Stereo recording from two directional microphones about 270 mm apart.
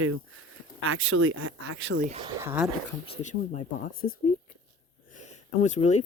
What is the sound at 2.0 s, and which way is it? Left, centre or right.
Speech, right.